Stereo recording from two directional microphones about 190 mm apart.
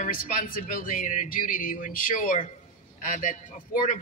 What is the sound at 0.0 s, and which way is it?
A man's voice, 45° left (ahead or behind).